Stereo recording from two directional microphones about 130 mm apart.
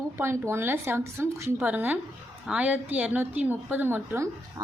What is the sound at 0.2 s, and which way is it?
A woman's voice, 20° right (ahead or behind).